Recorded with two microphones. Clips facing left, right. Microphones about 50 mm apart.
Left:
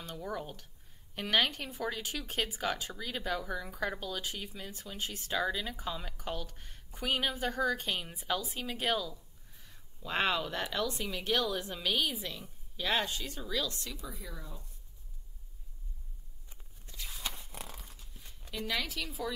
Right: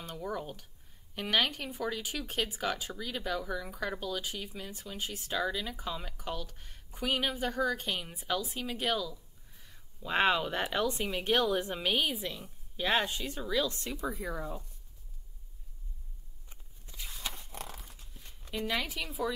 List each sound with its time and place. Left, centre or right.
0.0 s speech: centre
9.5 s a sound: centre
10.1 s speech: centre
12.7 s speech: right
17.1 s a sound: centre
18.5 s a woman's voice: centre